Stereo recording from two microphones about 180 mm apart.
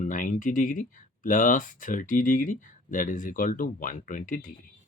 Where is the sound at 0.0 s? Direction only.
45° left (ahead or behind).